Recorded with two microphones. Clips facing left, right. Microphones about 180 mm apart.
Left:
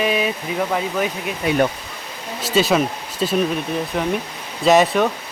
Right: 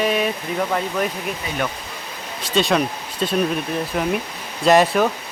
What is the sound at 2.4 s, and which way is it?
Speech, 5° left (ahead or behind).